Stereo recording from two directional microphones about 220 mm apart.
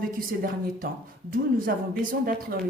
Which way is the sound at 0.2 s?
40° right (ahead or behind).